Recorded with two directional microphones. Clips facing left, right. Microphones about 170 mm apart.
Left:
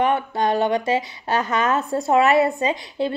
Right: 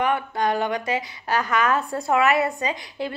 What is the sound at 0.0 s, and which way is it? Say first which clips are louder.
A woman's voice: left 3 dB; 25° left (ahead or behind).